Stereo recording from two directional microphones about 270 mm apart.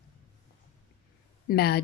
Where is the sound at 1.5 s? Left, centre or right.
Left.